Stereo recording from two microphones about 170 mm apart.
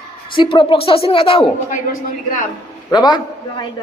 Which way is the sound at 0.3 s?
30° left (ahead or behind).